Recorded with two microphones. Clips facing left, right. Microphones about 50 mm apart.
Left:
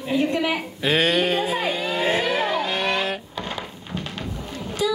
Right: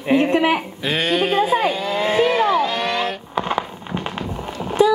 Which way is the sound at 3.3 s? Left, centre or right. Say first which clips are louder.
Right 9 dB; right.